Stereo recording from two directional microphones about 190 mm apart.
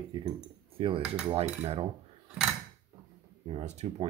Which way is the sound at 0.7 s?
30° right (ahead or behind).